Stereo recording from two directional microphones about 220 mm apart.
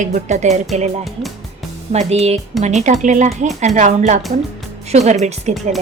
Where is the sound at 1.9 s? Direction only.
30° right (ahead or behind).